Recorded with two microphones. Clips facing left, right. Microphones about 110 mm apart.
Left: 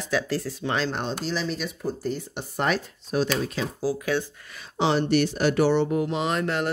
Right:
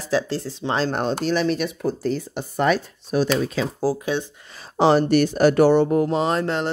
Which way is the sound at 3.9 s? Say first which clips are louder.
Right 2 dB; 40° right (ahead or behind).